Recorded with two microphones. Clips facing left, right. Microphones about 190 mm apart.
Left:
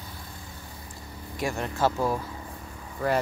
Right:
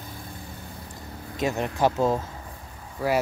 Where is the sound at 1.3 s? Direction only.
20° right (ahead or behind).